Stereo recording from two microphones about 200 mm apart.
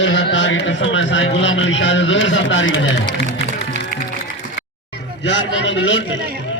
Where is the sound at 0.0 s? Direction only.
70° left (ahead or behind).